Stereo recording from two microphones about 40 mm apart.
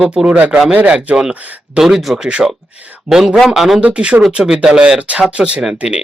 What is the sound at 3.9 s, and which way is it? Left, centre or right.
Speech, right.